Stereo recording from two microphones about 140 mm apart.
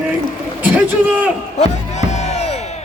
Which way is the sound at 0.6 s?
10° right (ahead or behind).